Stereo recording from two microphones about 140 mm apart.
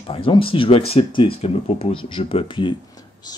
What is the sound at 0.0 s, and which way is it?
Speech, 40° left (ahead or behind).